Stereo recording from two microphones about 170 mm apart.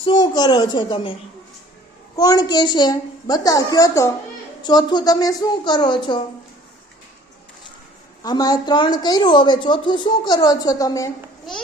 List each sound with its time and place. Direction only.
0.0 s speech: 25° left (ahead or behind)
2.1 s speech: 20° left (ahead or behind)
8.2 s speech: 25° left (ahead or behind)